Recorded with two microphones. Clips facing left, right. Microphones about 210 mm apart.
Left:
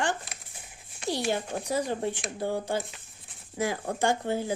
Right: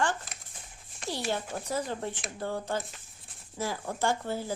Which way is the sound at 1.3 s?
15° left (ahead or behind).